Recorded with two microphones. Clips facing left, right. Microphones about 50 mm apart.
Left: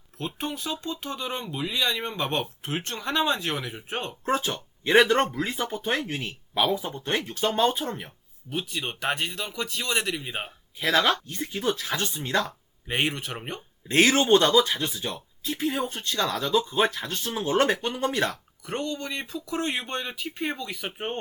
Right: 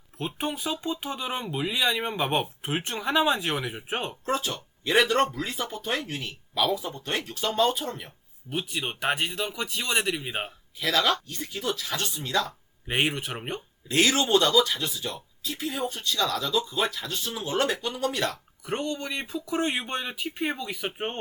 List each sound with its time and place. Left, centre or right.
0.2 s speech: centre
4.3 s speech: left
8.4 s speech: centre
10.8 s speech: left
12.5 s speech: centre
13.8 s speech: left
18.6 s speech: centre